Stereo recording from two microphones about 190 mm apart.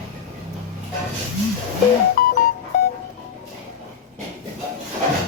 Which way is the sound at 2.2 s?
50° left (ahead or behind).